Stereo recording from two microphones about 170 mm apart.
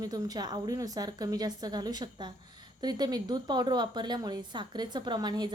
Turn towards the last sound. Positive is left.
turn(degrees=-25)  # may be behind; listen again after turning